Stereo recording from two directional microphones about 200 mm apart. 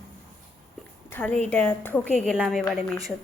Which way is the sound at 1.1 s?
5° left (ahead or behind).